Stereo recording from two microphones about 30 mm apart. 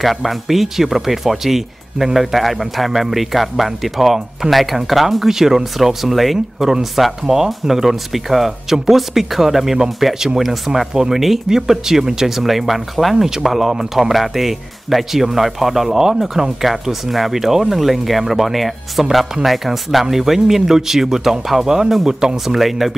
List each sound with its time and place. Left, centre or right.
0.0 s speech: centre
11.0 s speech: centre
13.1 s speech: centre
16.7 s speech: centre
22.6 s speech: centre